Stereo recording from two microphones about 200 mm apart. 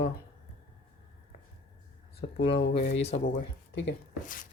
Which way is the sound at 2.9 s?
30° left (ahead or behind).